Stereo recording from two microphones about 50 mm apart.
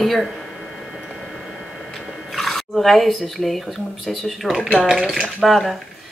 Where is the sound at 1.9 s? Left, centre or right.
Centre.